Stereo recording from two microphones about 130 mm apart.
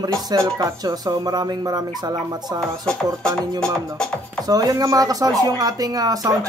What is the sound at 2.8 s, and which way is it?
Speech, 5° left (ahead or behind).